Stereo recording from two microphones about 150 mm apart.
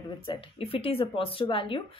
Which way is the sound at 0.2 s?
35° left (ahead or behind).